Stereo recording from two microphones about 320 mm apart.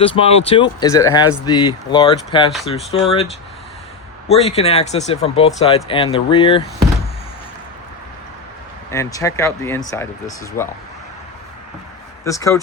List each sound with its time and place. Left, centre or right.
0.0 s speech: centre
9.1 s speech: centre
12.2 s speech: centre